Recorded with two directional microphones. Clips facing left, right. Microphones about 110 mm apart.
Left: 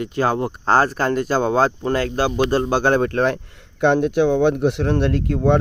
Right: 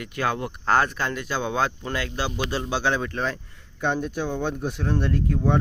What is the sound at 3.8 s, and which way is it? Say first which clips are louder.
Speech: left 10 dB; 75° left (ahead or behind).